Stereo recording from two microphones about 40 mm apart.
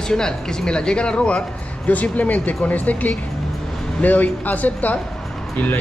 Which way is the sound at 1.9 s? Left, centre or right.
Left.